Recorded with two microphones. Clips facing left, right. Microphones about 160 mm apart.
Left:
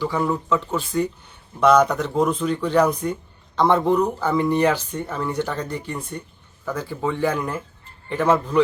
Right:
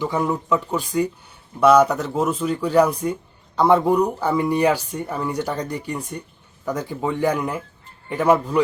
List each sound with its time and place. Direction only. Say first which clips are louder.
0.0 s speech: even; 20° right (ahead or behind)